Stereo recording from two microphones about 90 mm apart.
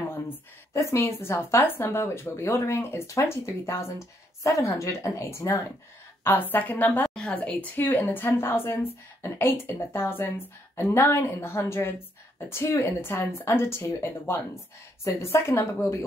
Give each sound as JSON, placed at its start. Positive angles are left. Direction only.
{"t": 0.7, "sound": "a woman's voice", "side_deg": 30}